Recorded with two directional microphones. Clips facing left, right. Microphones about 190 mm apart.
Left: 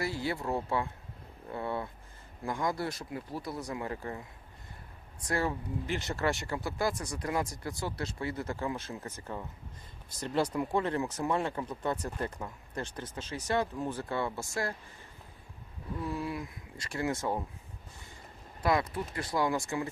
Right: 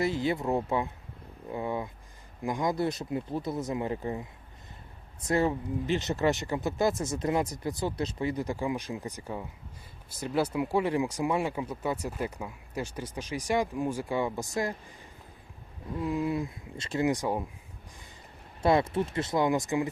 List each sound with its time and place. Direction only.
0.0 s speech: 20° right (ahead or behind)
16.0 s speech: 15° right (ahead or behind)
18.6 s speech: 25° right (ahead or behind)